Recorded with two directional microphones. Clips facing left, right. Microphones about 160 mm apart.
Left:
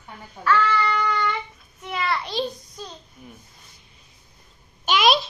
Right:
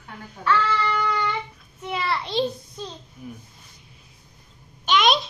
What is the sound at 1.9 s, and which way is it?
A child's voice, 30° right (ahead or behind).